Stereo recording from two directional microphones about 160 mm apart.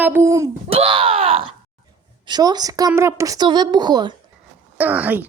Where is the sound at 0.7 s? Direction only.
35° right (ahead or behind).